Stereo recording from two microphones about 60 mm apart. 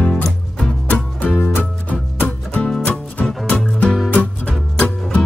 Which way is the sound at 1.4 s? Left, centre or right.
Left.